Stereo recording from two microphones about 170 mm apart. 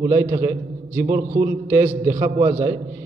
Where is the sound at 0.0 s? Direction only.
15° right (ahead or behind).